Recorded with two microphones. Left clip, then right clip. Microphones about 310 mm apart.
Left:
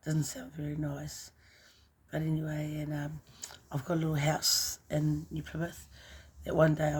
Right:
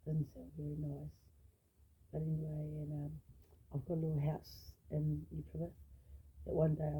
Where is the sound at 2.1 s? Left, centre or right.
Left.